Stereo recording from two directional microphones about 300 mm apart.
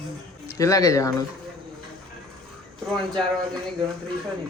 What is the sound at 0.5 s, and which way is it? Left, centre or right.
Speech, centre.